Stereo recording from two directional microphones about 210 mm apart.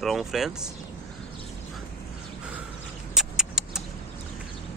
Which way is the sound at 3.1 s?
5° right (ahead or behind).